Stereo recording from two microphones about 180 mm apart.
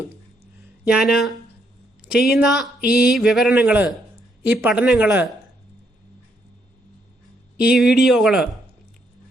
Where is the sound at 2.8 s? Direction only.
60° left (ahead or behind).